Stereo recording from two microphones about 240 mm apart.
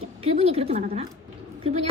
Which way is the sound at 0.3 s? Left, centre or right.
Right.